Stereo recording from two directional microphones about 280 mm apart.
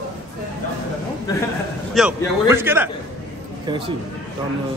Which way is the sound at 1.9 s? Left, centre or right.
Centre.